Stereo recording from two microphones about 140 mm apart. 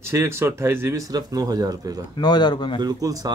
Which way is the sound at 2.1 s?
30° left (ahead or behind).